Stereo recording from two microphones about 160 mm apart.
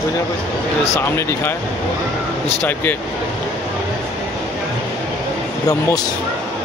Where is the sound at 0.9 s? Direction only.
15° left (ahead or behind).